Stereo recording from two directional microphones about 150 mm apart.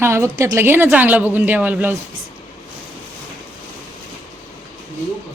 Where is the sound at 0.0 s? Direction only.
20° right (ahead or behind).